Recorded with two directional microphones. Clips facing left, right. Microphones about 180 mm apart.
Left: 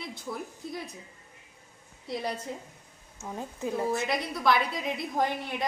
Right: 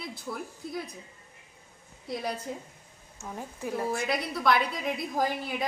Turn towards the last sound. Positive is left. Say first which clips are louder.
# even
turn(degrees=-5)  # may be behind; listen again after turning